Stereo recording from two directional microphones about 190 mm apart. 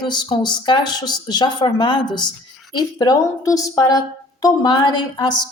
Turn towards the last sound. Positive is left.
turn(degrees=20)  # may be behind; listen again after turning